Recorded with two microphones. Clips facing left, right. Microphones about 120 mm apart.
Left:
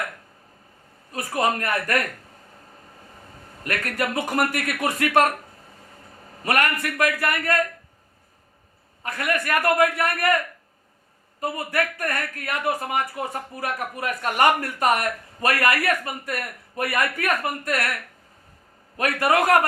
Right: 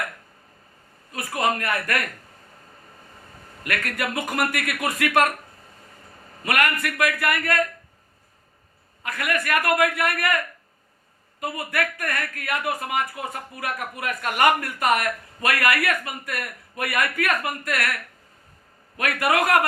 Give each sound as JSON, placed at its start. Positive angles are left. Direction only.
{"t": 1.1, "sound": "a man's voice", "side_deg": 35}
{"t": 3.6, "sound": "a man's voice", "side_deg": 35}
{"t": 6.4, "sound": "a man's voice", "side_deg": 35}
{"t": 9.0, "sound": "a man's voice", "side_deg": 35}
{"t": 11.3, "sound": "a man's voice", "side_deg": 35}
{"t": 18.9, "sound": "a man's voice", "side_deg": 30}